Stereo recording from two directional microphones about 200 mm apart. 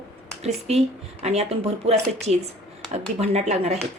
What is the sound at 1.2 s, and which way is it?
Speech, 30° right (ahead or behind).